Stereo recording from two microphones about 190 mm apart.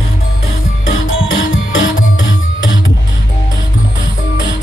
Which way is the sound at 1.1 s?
90° left.